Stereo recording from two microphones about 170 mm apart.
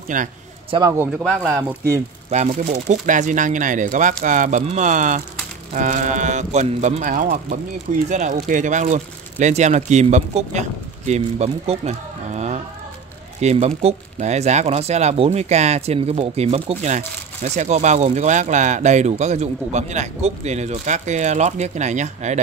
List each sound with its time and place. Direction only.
0.1 s speech: 50° right (ahead or behind)
0.7 s a man's voice: 25° right (ahead or behind)
1.2 s speech: 5° left (ahead or behind)
2.3 s speech: 40° right (ahead or behind)